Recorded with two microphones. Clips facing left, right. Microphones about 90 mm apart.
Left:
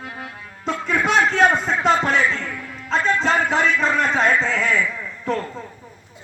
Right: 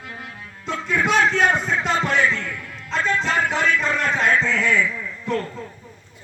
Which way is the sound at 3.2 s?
45° left (ahead or behind).